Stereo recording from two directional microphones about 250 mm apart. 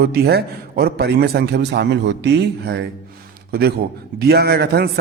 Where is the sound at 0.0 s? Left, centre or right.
Right.